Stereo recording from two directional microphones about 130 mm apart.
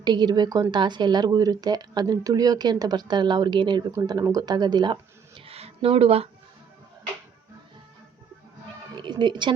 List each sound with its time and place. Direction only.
0.0 s speech: 35° right (ahead or behind); by 6.2 s 50° right (ahead or behind)
9.0 s speech: 35° right (ahead or behind)